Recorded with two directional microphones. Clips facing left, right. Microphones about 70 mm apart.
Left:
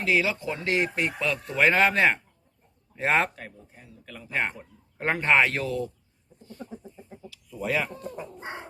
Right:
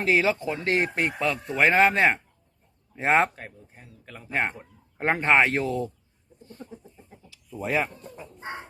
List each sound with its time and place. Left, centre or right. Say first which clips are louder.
0.0 s speech: right 2 dB; right
1.2 s a man's voice: even; right
3.3 s speech: even; right
6.6 s a sound: left 2 dB; centre
6.9 s chicken: left 5 dB; centre
7.3 s a sound: even; right
8.1 s chicken: left 5 dB; centre